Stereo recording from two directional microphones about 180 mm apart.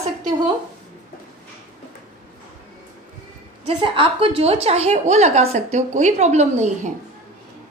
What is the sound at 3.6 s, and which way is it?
A woman's voice, 30° right (ahead or behind).